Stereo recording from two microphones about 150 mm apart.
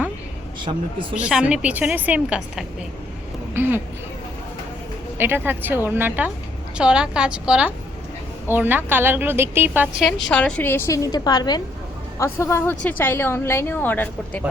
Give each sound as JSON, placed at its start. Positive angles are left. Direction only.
{"t": 1.1, "sound": "a woman's voice", "side_deg": -5}
{"t": 5.1, "sound": "a woman's voice", "side_deg": -15}
{"t": 10.0, "sound": "a woman's voice", "side_deg": 5}